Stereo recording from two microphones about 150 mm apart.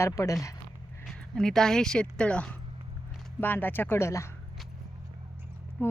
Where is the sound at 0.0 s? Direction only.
20° left (ahead or behind).